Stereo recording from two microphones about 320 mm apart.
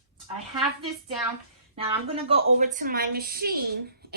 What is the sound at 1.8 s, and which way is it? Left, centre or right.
A woman's voice, centre.